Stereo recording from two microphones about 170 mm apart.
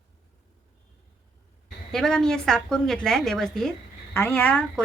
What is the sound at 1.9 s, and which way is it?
Speech, 5° left (ahead or behind).